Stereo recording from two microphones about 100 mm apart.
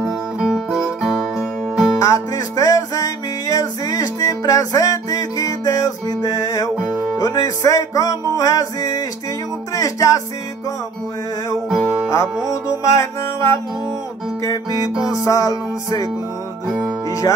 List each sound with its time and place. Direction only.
0.4 s guitar: 5° right (ahead or behind)
2.0 s music: 35° left (ahead or behind)
6.7 s music: 10° right (ahead or behind)
7.2 s music: 35° left (ahead or behind)
11.7 s music: 5° right (ahead or behind)
12.1 s music: 30° left (ahead or behind)
15.1 s music: 35° left (ahead or behind)
16.6 s music: 10° right (ahead or behind)